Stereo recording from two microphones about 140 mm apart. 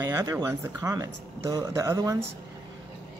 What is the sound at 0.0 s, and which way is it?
Speech, 25° right (ahead or behind).